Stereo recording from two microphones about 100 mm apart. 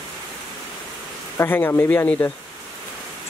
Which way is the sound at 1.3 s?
25° left (ahead or behind).